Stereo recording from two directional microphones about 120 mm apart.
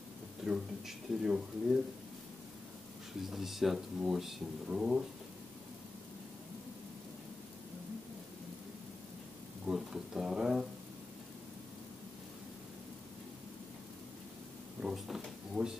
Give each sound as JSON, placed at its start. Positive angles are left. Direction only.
{"t": 0.5, "sound": "speech", "side_deg": -5}
{"t": 3.3, "sound": "speech", "side_deg": 0}
{"t": 9.7, "sound": "a sound", "side_deg": -5}
{"t": 14.8, "sound": "speech", "side_deg": -5}